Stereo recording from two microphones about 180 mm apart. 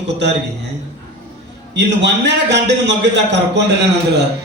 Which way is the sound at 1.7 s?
75° right (ahead or behind).